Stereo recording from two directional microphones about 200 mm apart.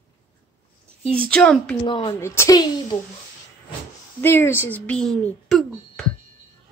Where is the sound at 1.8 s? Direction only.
25° left (ahead or behind).